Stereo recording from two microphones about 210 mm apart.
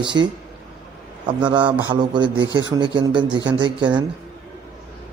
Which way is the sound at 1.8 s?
20° right (ahead or behind).